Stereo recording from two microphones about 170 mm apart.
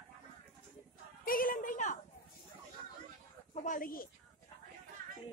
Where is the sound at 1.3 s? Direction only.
55° left (ahead or behind).